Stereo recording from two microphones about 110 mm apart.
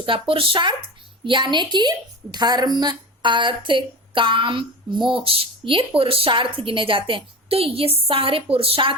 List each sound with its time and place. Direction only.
0.0 s a woman's voice: 55° right (ahead or behind)